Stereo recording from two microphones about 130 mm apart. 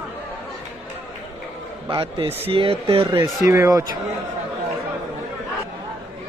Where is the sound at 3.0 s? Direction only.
35° right (ahead or behind).